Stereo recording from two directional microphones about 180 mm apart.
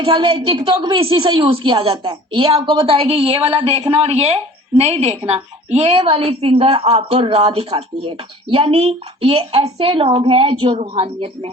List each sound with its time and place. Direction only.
0.0 s a woman's voice: 30° right (ahead or behind)